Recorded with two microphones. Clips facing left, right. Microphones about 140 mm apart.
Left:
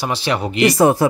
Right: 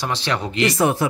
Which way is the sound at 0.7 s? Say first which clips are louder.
Left 6 dB; 35° left (ahead or behind).